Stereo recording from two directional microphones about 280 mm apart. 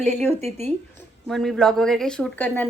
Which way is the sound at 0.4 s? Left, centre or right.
Right.